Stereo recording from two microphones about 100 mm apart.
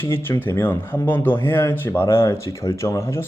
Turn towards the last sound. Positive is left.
turn(degrees=25)  # may be behind; listen again after turning